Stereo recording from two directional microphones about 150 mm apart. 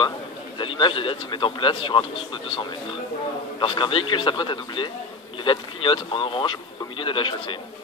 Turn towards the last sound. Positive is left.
turn(degrees=35)  # may be behind; listen again after turning